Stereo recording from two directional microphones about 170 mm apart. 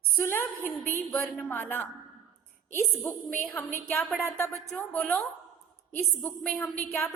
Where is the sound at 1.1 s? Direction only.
Centre (ahead or behind).